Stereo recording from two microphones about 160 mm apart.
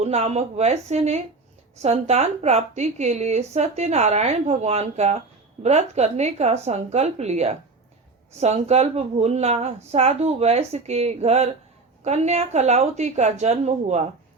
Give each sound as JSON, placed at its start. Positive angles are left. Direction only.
{"t": 0.0, "sound": "speech", "side_deg": -40}